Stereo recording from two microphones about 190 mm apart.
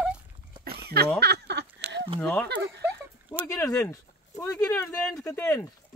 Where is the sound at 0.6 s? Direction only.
55° right (ahead or behind).